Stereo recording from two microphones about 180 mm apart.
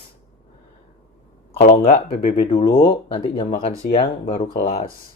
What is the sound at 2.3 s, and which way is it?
Speech, 30° left (ahead or behind).